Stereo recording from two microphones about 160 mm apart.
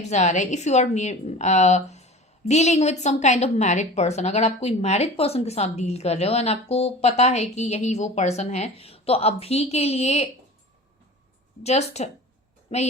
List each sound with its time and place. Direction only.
0.1 s a woman's voice: 45° left (ahead or behind)
11.6 s a woman's voice: 40° left (ahead or behind)